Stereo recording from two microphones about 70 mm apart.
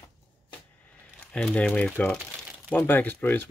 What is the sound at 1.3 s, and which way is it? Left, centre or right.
Speech, centre.